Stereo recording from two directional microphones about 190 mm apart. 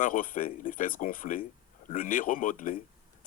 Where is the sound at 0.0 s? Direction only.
45° left (ahead or behind).